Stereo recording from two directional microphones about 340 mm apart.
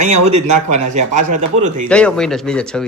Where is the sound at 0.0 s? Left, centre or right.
Centre.